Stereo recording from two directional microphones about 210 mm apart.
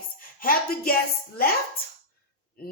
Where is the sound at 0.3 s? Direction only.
45° left (ahead or behind).